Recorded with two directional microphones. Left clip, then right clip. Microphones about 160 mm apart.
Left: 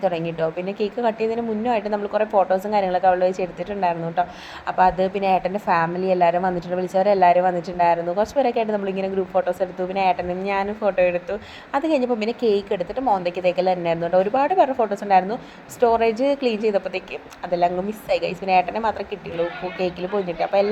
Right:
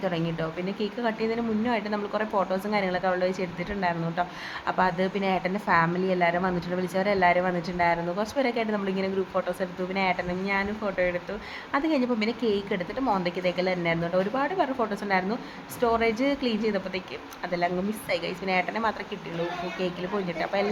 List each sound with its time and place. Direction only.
0.0 s a woman's voice: 20° left (ahead or behind)
18.1 s a woman's voice: 20° left (ahead or behind)